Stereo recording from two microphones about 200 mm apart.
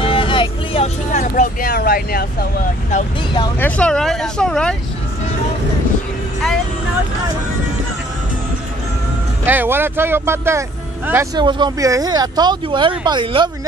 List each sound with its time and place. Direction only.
0.0 s vehicle: 25° left (ahead or behind)
1.1 s speech: 40° left (ahead or behind)
3.5 s speech: 10° left (ahead or behind)
9.5 s speech: 10° right (ahead or behind)
11.4 s speech: 20° right (ahead or behind)